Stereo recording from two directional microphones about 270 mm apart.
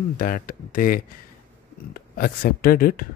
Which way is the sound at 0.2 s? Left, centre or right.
Left.